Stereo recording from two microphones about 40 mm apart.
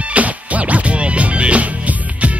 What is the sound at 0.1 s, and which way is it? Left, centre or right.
Music, right.